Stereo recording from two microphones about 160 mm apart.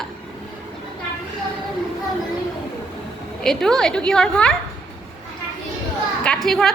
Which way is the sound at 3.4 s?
5° left (ahead or behind).